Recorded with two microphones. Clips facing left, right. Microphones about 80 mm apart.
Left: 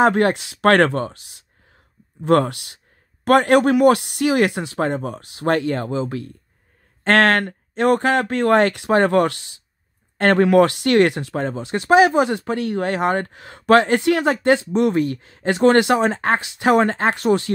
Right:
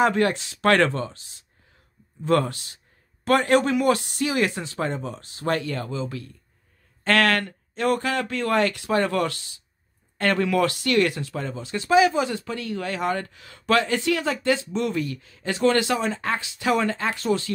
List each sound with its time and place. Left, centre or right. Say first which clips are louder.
0.3 s speech: left 5 dB; left
2.2 s speech: left 5 dB; left
3.3 s speech: left 5 dB; left